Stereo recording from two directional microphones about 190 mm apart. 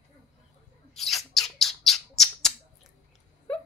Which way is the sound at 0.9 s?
Centre (ahead or behind).